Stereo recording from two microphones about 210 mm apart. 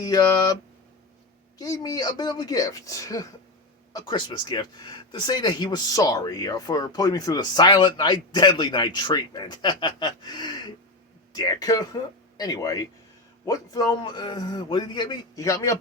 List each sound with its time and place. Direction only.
0.0 s speech: 20° left (ahead or behind)
1.5 s speech: 15° left (ahead or behind)